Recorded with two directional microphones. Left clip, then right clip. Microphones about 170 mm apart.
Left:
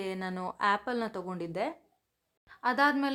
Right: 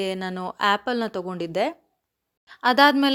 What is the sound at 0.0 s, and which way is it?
Speech, 30° right (ahead or behind).